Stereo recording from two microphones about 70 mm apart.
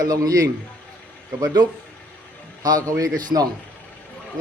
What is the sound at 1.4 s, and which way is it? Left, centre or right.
Speech, right.